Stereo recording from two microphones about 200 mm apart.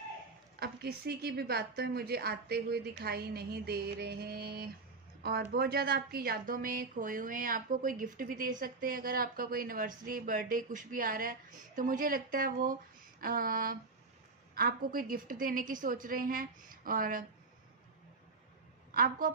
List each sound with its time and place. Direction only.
0.6 s a woman's voice: 50° right (ahead or behind)
18.9 s a woman's voice: 45° right (ahead or behind)